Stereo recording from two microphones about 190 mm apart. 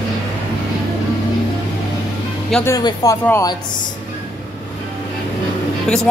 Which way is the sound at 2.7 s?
20° left (ahead or behind).